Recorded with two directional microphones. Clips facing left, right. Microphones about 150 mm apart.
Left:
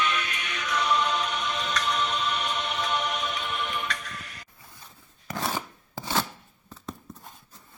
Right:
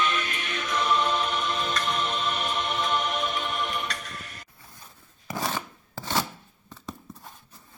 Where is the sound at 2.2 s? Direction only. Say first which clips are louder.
Right 1 dB; 45° right (ahead or behind).